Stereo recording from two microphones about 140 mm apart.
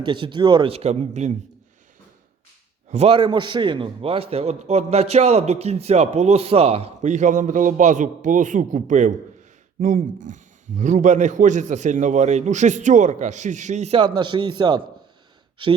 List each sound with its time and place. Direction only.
0.0 s a man's voice: 35° right (ahead or behind); by 1.4 s 55° right (ahead or behind)
2.9 s a man's voice: 50° right (ahead or behind)
3.2 s a man's voice: 35° right (ahead or behind); by 14.0 s 55° right (ahead or behind)
14.0 s a man's voice: 35° right (ahead or behind)